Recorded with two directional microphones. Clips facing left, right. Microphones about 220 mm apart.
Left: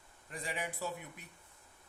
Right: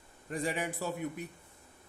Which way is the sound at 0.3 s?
45° right (ahead or behind).